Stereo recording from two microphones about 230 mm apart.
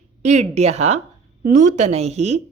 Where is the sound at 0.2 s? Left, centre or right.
Right.